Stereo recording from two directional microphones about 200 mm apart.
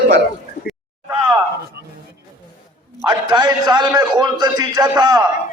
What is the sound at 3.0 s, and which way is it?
A man's voice, 20° right (ahead or behind).